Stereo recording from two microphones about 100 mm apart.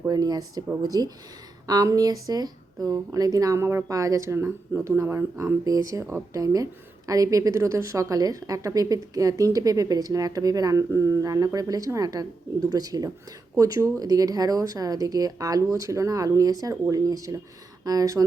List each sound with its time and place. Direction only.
0.1 s a woman's voice: 40° right (ahead or behind)